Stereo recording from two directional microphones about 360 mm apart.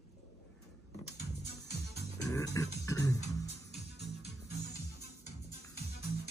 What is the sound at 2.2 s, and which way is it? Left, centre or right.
Music, centre.